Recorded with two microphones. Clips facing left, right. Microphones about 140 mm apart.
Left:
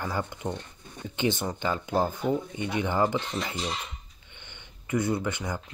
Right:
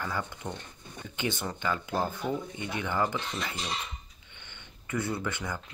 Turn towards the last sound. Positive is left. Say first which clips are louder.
# left 4 dB
turn(degrees=20)  # may be behind; listen again after turning